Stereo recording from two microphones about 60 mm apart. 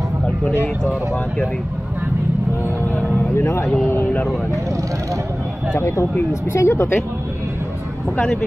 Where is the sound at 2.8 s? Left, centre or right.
Left.